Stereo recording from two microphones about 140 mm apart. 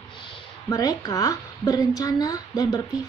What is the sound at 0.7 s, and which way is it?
A woman's voice, 25° left (ahead or behind).